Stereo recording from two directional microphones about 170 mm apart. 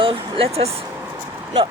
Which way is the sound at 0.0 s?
35° right (ahead or behind).